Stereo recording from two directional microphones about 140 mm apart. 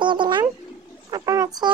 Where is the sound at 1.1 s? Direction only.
25° right (ahead or behind).